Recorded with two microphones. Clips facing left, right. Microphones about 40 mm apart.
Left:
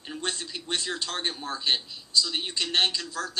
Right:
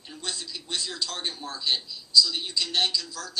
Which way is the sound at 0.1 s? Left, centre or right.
Left.